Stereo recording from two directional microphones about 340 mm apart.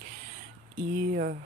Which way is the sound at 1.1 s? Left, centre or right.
Right.